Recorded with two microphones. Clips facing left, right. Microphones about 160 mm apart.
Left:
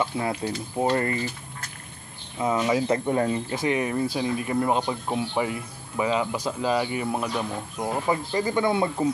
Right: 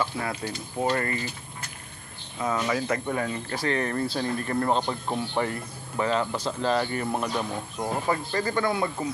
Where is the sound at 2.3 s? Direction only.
20° left (ahead or behind).